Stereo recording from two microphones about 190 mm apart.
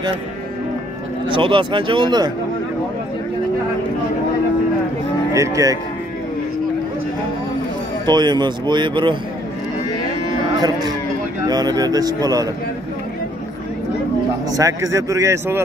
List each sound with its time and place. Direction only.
1.3 s speech: 25° right (ahead or behind)
5.3 s a man's voice: 15° right (ahead or behind)
8.1 s speech: 25° right (ahead or behind)
11.4 s speech: 20° right (ahead or behind)
14.6 s a man's voice: 15° right (ahead or behind)